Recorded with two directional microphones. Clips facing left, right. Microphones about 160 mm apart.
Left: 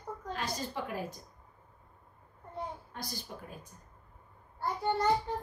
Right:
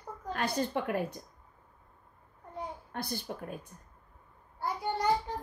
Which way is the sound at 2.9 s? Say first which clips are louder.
Right 6 dB; 60° right (ahead or behind).